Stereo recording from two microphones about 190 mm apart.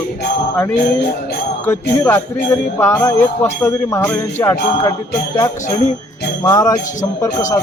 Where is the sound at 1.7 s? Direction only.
15° left (ahead or behind).